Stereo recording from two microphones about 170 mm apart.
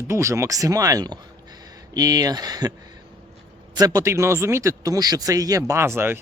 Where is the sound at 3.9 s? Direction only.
15° right (ahead or behind).